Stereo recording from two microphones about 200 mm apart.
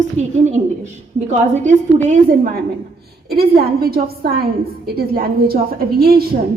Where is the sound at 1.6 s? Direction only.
40° right (ahead or behind).